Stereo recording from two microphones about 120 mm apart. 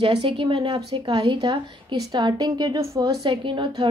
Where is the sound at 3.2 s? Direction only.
40° right (ahead or behind).